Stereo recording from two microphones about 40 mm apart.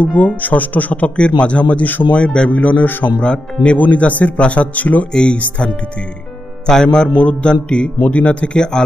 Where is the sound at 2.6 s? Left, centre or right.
Left.